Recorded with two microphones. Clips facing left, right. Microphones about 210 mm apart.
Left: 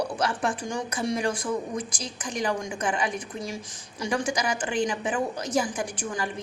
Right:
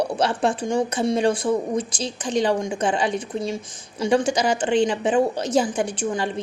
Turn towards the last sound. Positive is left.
turn(degrees=-25)  # may be behind; listen again after turning